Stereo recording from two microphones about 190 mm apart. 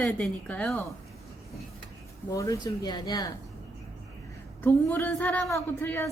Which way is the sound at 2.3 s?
15° left (ahead or behind).